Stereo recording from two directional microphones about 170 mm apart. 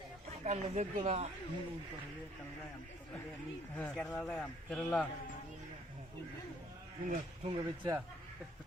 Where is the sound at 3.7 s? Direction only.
5° left (ahead or behind).